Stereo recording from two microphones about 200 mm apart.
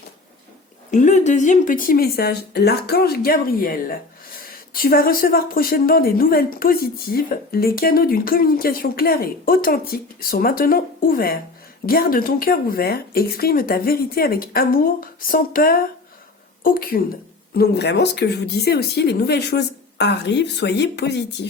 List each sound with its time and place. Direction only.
0.9 s speech: 35° left (ahead or behind)
17.6 s a woman's voice: 55° left (ahead or behind)